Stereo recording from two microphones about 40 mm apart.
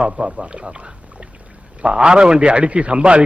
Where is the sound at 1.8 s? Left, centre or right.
Right.